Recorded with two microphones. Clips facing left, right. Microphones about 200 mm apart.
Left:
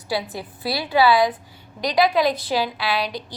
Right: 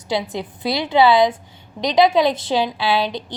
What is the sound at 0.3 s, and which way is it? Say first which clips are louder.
A woman's voice: right 4 dB; 20° right (ahead or behind).